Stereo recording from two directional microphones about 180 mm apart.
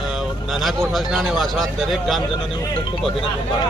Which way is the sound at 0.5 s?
Centre (ahead or behind).